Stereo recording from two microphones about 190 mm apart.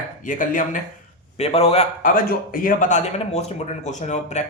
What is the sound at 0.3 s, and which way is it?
Speech, 45° left (ahead or behind).